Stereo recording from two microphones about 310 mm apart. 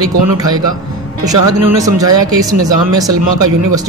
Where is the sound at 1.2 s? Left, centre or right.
Centre.